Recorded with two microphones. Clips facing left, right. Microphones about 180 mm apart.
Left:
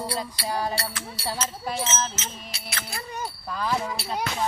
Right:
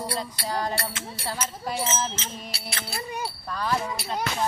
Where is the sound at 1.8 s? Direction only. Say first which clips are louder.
Right 1 dB; 35° right (ahead or behind).